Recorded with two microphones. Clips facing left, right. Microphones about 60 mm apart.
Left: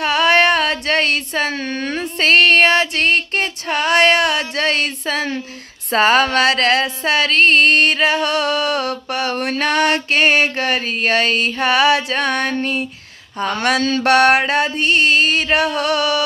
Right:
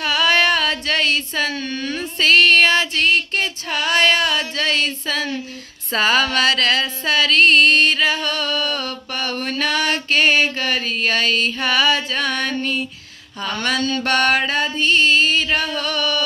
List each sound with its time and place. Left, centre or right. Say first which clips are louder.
0.0 s a sound: left 3 dB; left
5.9 s music: left 4 dB; left
7.2 s music: even; left
13.4 s speech: left 5 dB; left
13.7 s mantra: left 6 dB; left
14.5 s music: left 2 dB; left